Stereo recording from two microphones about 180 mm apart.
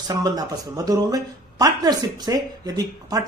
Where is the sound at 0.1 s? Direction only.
20° right (ahead or behind).